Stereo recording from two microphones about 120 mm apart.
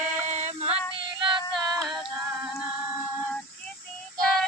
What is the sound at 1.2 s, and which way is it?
Female singing, 30° right (ahead or behind).